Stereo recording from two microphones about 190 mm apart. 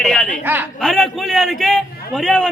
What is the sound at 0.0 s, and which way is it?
A man's voice, 5° left (ahead or behind).